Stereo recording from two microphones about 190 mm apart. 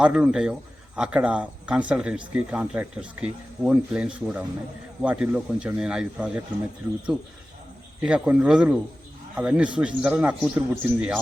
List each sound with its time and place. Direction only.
0.0 s speech: 5° right (ahead or behind)
8.0 s a man's voice: 5° right (ahead or behind)